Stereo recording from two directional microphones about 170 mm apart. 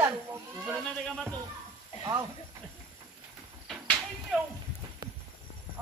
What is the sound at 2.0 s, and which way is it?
Speech, 25° right (ahead or behind).